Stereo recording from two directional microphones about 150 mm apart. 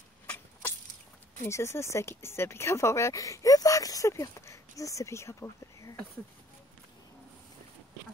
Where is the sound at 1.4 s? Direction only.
20° left (ahead or behind).